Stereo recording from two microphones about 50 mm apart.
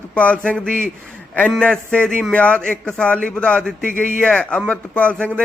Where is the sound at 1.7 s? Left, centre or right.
Centre.